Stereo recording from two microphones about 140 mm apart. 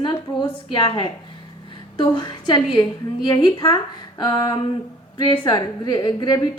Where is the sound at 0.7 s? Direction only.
35° left (ahead or behind).